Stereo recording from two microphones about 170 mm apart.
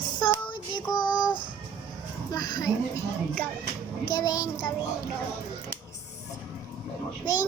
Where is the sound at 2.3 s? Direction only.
20° left (ahead or behind).